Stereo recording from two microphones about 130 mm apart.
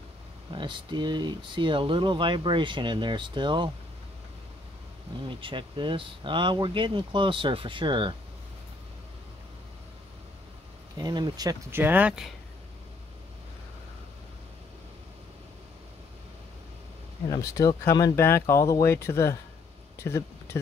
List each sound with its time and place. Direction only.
0.5 s speech: 35° right (ahead or behind)
5.2 s speech: 40° right (ahead or behind)
11.0 s speech: 35° right (ahead or behind)
11.7 s speech: 15° right (ahead or behind)
17.3 s speech: 25° left (ahead or behind)